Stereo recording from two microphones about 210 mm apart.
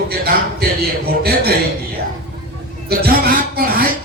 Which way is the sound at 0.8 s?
50° right (ahead or behind).